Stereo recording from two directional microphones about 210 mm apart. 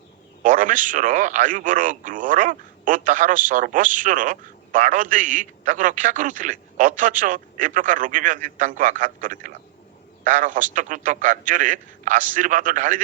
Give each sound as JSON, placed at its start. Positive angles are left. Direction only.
{"t": 0.4, "sound": "speech", "side_deg": -40}